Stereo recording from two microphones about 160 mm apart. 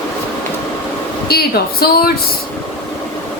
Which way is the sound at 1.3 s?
75° left (ahead or behind).